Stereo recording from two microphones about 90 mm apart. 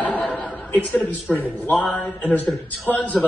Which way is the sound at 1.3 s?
20° left (ahead or behind).